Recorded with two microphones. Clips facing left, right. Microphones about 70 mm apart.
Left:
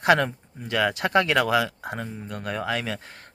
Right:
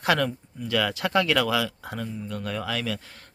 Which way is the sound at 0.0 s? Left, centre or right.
Left.